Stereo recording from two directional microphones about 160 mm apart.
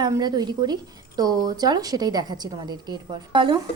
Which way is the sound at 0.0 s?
25° right (ahead or behind).